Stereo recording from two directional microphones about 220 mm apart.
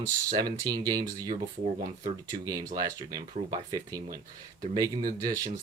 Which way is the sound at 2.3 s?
15° right (ahead or behind).